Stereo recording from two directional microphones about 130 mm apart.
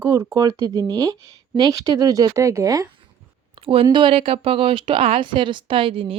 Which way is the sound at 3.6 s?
45° right (ahead or behind).